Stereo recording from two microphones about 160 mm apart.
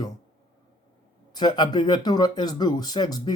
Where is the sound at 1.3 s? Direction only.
25° left (ahead or behind).